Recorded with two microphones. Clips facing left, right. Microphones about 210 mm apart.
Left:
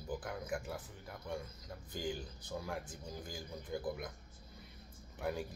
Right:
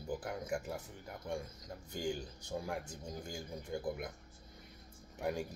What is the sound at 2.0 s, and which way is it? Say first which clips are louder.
Speech: right 3 dB; 25° right (ahead or behind).